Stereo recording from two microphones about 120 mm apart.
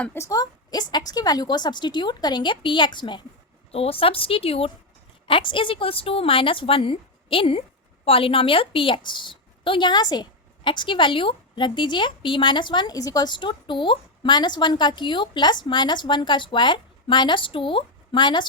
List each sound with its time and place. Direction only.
0.0 s a woman's voice: 20° left (ahead or behind)
0.3 s a woman's voice: 35° left (ahead or behind)
3.7 s a woman's voice: 55° left (ahead or behind)